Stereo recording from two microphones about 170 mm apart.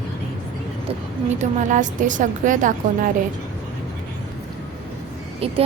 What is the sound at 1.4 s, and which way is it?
A woman's voice, 50° right (ahead or behind).